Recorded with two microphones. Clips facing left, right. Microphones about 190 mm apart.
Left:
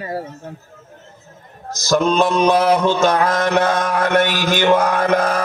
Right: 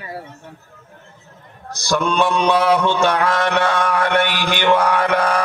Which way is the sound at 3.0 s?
40° left (ahead or behind).